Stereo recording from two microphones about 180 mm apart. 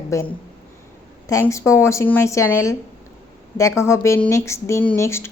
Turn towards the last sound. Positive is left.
turn(degrees=15)  # may be behind; listen again after turning